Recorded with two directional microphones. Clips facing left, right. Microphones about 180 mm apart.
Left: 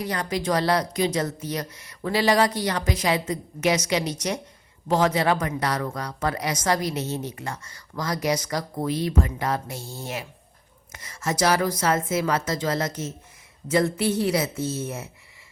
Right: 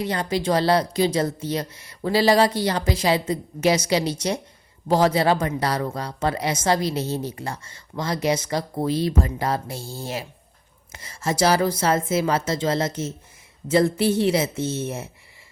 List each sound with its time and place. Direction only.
0.0 s a woman's voice: 30° right (ahead or behind)